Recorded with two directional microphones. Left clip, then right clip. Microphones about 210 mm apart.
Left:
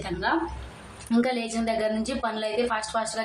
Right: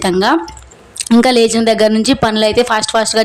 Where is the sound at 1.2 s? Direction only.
45° right (ahead or behind).